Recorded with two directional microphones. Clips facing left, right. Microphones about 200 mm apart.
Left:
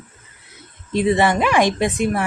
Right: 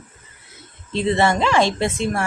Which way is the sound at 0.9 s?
15° left (ahead or behind).